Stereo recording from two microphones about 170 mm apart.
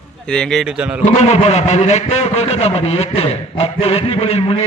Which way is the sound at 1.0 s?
45° left (ahead or behind).